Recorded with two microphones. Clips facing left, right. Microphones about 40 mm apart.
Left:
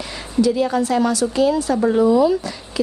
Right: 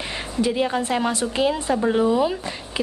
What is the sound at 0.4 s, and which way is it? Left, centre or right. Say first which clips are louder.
A woman's voice: left 5 dB; right.